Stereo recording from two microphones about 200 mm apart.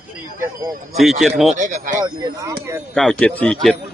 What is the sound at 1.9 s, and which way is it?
Speech, 20° right (ahead or behind).